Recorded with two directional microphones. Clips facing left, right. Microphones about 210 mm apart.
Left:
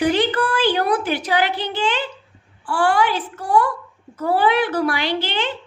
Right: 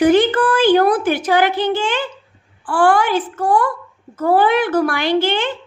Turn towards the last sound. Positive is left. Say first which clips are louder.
# right 6 dB
turn(degrees=-50)  # may be behind; listen again after turning